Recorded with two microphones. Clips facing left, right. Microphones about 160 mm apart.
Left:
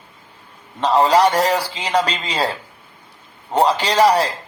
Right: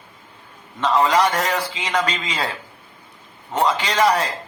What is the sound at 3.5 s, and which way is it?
Speech, 35° left (ahead or behind).